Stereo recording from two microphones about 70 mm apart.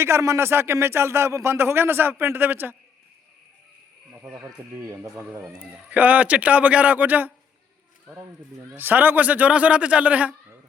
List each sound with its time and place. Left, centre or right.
0.0 s a man's voice: right
4.8 s speech: right
5.9 s a man's voice: right
8.1 s speech: right
8.7 s a man's voice: right